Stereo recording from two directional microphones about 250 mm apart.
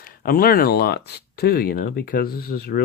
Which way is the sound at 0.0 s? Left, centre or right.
Left.